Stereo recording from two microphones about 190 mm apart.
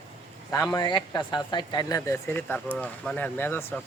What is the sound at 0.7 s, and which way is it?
Speech, 20° left (ahead or behind).